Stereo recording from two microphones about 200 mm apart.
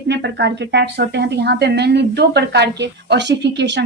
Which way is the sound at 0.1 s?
60° right (ahead or behind).